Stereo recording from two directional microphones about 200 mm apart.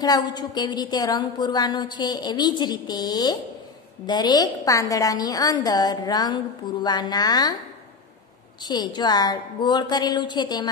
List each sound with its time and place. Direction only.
0.0 s a woman's voice: 20° left (ahead or behind)
8.6 s a woman's voice: 20° left (ahead or behind)